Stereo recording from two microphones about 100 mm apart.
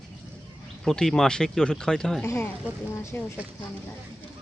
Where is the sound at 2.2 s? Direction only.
30° left (ahead or behind).